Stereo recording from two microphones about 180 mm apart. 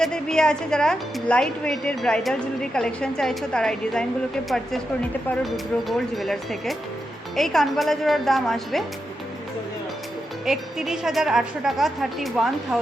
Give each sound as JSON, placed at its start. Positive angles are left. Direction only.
{"t": 0.0, "sound": "a woman's voice", "side_deg": 5}
{"t": 10.4, "sound": "a woman's voice", "side_deg": 0}